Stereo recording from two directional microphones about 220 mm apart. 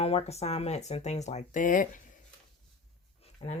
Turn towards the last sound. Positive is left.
turn(degrees=25)  # may be behind; listen again after turning